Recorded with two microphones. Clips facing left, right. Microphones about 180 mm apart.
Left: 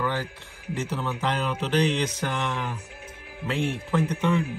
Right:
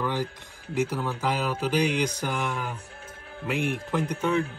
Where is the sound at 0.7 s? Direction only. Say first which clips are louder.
Right 3 dB; 10° right (ahead or behind).